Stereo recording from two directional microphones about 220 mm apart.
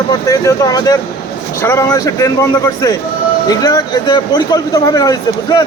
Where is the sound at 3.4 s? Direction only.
15° left (ahead or behind).